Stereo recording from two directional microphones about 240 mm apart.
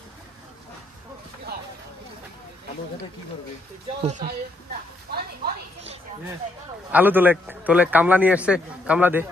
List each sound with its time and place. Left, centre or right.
4.0 s speech: right
5.1 s a sound: right
6.9 s a man's voice: centre